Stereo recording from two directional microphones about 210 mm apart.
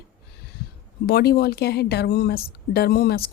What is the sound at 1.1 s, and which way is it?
Speech, 50° left (ahead or behind).